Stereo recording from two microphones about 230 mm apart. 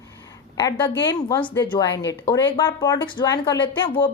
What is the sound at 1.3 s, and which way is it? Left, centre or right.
Speech, left.